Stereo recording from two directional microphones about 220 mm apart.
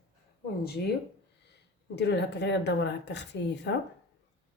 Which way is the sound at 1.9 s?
50° left (ahead or behind).